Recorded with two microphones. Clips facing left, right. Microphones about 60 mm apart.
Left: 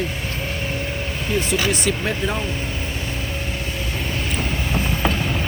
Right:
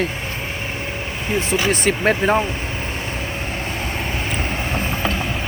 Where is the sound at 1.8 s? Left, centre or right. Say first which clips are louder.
Right 5 dB; right.